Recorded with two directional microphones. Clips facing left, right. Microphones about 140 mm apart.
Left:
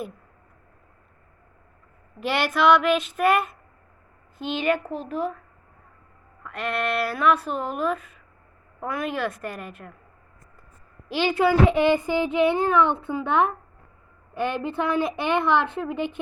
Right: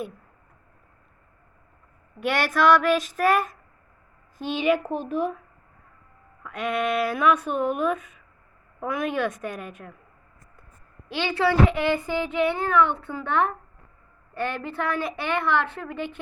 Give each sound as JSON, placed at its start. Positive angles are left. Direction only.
{"t": 2.3, "sound": "speech", "side_deg": 0}
{"t": 4.9, "sound": "speech", "side_deg": -20}
{"t": 6.4, "sound": "speech", "side_deg": 0}
{"t": 11.3, "sound": "speech", "side_deg": 20}